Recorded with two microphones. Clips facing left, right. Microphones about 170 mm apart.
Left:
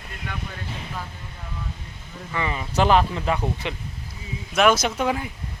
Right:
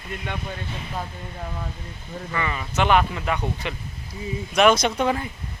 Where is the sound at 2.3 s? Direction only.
20° left (ahead or behind).